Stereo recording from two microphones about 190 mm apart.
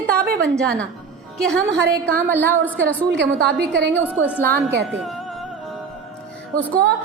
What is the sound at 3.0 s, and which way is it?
Speech, 65° right (ahead or behind).